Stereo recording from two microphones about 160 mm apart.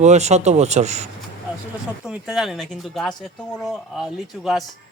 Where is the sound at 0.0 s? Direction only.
45° right (ahead or behind).